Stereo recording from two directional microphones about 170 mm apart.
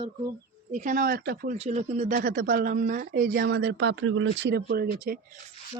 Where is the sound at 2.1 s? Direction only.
60° right (ahead or behind).